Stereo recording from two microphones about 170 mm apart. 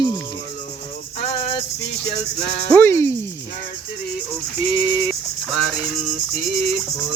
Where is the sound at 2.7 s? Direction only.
15° left (ahead or behind).